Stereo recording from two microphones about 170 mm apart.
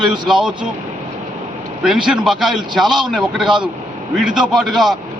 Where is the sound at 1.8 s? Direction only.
5° right (ahead or behind).